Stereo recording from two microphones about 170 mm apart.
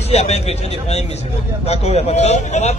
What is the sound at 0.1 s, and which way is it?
A man's voice, 40° left (ahead or behind).